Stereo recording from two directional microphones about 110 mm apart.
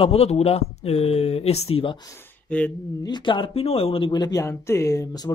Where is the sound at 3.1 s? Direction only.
45° left (ahead or behind).